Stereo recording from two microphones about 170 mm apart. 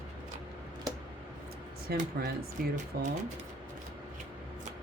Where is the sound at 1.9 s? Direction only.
65° right (ahead or behind).